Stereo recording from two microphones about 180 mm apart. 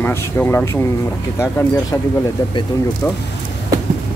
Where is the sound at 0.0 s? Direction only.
10° left (ahead or behind).